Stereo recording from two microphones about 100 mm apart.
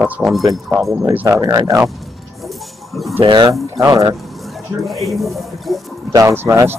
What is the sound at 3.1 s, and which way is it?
Speech, 65° right (ahead or behind).